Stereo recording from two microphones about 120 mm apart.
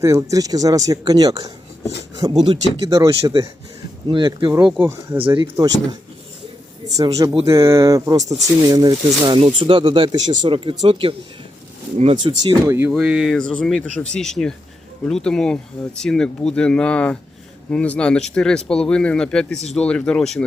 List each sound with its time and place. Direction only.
0.0 s speech: 25° right (ahead or behind)
4.1 s speech: 45° right (ahead or behind)
5.5 s speech: 30° right (ahead or behind)
11.9 s speech: 65° right (ahead or behind)
12.2 s speech: 35° right (ahead or behind)
12.9 s speech: 5° right (ahead or behind)